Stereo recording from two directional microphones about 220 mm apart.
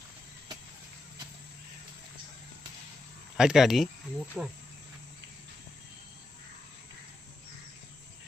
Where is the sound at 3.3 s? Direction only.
Centre (ahead or behind).